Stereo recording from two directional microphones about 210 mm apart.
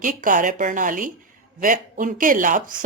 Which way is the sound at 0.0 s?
40° right (ahead or behind).